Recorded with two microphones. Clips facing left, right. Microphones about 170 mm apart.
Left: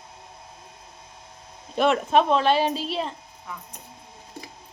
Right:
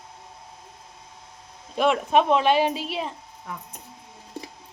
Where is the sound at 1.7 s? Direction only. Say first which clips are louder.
Even; 5° right (ahead or behind).